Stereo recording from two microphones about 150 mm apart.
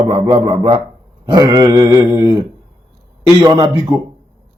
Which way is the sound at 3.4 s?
25° right (ahead or behind).